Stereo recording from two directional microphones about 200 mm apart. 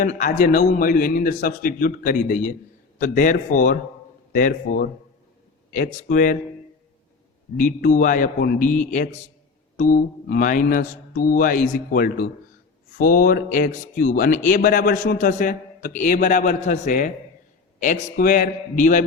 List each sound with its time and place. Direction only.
0.2 s a man's voice: 40° left (ahead or behind)
7.6 s a man's voice: 40° left (ahead or behind)